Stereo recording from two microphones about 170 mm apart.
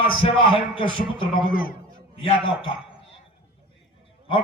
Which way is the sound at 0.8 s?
30° left (ahead or behind).